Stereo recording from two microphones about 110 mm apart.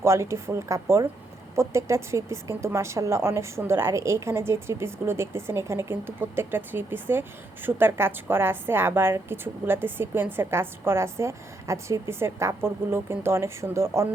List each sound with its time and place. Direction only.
0.0 s a woman's voice: 25° right (ahead or behind)